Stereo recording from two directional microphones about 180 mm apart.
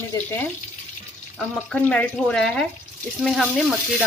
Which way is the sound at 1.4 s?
5° left (ahead or behind).